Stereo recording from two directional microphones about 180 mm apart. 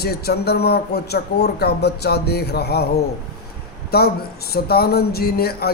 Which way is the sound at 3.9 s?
60° left (ahead or behind).